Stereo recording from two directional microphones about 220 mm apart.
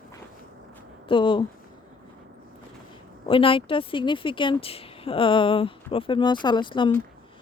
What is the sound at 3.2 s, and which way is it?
A woman's voice, 25° left (ahead or behind).